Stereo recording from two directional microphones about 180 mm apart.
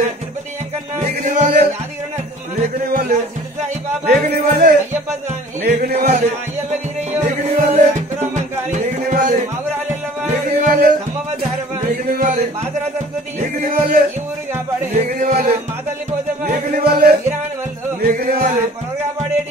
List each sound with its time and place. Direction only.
0.9 s music: 45° right (ahead or behind)
2.9 s music: 50° right (ahead or behind)
6.7 s music: 40° right (ahead or behind)
16.4 s speech: 50° right (ahead or behind)